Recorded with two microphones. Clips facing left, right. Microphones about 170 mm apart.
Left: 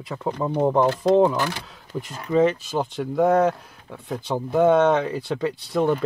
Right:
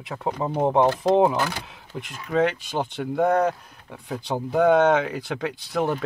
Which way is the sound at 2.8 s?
Centre (ahead or behind).